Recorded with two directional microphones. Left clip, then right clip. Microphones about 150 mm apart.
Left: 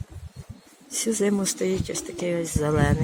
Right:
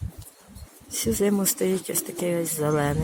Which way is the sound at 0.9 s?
Centre (ahead or behind).